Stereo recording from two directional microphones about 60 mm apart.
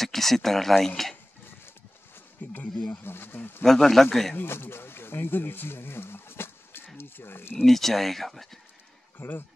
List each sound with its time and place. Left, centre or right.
0.0 s speech: centre
2.4 s speech: left
2.9 s speech: left
3.6 s speech: centre
4.4 s speech: left
7.6 s speech: centre